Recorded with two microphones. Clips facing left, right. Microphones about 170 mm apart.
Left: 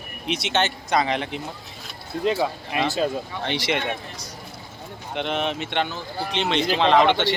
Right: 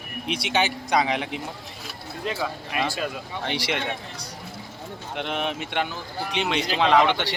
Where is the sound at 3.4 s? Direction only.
5° right (ahead or behind).